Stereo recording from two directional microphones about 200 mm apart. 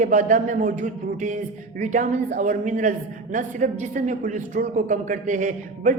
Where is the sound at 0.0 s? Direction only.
40° right (ahead or behind).